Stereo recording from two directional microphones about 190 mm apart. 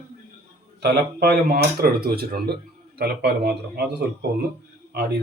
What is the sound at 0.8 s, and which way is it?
Speech, 55° right (ahead or behind).